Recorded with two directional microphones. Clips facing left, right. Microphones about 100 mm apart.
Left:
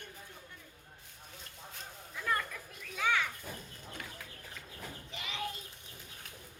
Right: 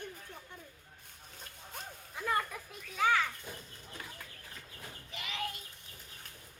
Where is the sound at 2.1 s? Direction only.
25° right (ahead or behind).